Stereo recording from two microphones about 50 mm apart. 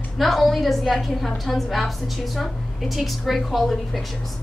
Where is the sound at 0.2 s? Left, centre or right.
Centre.